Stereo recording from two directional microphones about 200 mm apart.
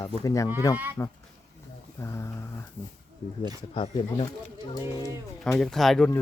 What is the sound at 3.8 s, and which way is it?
Speech, 25° left (ahead or behind).